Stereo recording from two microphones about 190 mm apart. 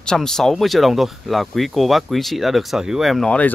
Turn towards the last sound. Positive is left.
turn(degrees=5)  # may be behind; listen again after turning